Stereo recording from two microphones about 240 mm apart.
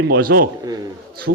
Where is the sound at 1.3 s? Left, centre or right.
Right.